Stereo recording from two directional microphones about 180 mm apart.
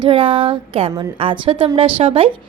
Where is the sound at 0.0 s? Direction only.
30° right (ahead or behind).